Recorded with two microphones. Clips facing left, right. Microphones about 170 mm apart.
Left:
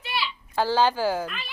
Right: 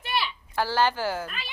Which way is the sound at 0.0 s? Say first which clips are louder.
Right 1 dB; 55° right (ahead or behind).